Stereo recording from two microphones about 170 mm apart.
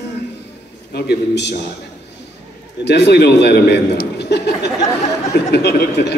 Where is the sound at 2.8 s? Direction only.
85° left.